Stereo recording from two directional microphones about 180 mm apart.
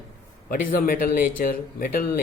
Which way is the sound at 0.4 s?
50° left (ahead or behind).